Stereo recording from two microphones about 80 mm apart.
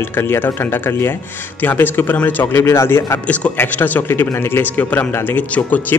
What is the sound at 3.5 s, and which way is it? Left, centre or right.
Speech, left.